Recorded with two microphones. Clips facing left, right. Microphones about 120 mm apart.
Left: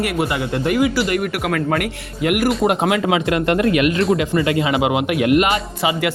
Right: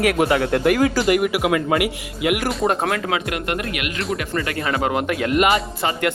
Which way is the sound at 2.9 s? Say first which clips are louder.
Left 5 dB; 25° left (ahead or behind).